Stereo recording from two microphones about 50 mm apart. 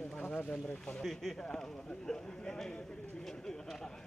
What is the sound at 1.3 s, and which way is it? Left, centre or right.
Speech, centre.